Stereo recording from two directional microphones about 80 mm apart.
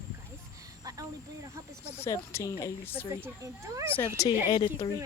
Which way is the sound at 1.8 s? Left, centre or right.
Left.